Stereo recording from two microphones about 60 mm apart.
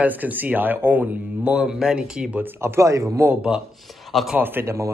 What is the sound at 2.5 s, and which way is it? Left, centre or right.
Speech, right.